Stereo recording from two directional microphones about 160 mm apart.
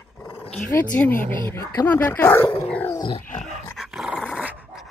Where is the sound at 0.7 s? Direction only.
10° left (ahead or behind).